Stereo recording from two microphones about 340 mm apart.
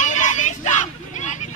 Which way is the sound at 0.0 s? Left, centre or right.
Left.